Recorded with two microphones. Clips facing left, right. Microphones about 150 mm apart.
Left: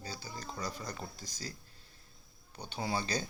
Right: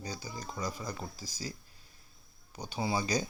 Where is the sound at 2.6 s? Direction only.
10° right (ahead or behind).